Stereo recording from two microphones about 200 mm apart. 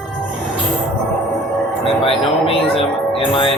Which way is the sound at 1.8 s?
30° left (ahead or behind).